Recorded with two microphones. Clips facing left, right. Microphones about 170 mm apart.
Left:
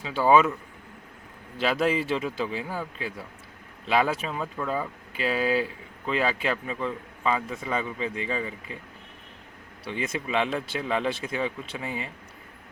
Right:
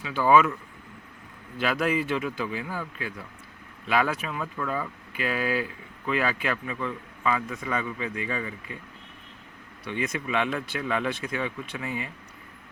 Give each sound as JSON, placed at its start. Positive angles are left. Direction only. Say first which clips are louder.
{"t": 0.0, "sound": "a man's voice", "louder": "even", "side_deg": 30}
{"t": 1.5, "sound": "a man's voice", "louder": "left 1 dB", "side_deg": 30}
{"t": 9.8, "sound": "a man's voice", "louder": "right 1 dB", "side_deg": 30}